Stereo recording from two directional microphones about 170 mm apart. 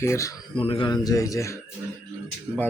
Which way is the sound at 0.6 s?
30° left (ahead or behind).